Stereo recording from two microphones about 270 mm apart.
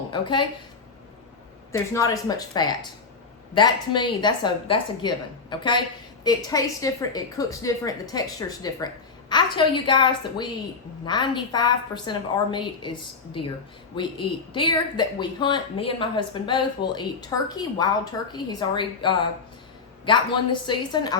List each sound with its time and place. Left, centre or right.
0.1 s a woman's voice: centre
1.7 s a woman's voice: centre